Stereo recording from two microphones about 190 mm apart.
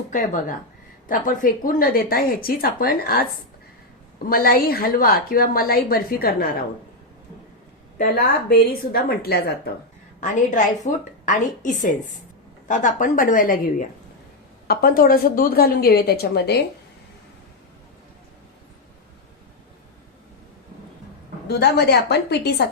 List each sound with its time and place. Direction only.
0.1 s speech: 45° left (ahead or behind)
4.3 s speech: 50° left (ahead or behind)
7.9 s speech: 50° left (ahead or behind)
10.2 s a woman's voice: 40° left (ahead or behind); by 16.6 s 60° left (ahead or behind)
21.4 s a woman's voice: 60° left (ahead or behind)